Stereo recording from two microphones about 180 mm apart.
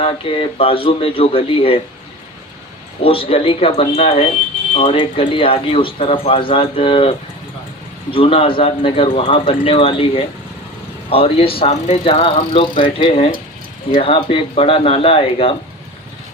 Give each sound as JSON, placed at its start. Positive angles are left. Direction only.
{"t": 0.0, "sound": "speech", "side_deg": 30}
{"t": 3.0, "sound": "speech", "side_deg": 30}